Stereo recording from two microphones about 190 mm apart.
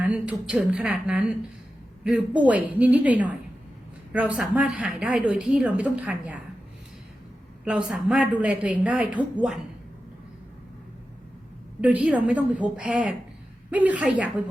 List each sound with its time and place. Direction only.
0.0 s a woman's voice: 5° right (ahead or behind)
7.6 s a woman's voice: 5° right (ahead or behind)
11.8 s a woman's voice: 5° right (ahead or behind)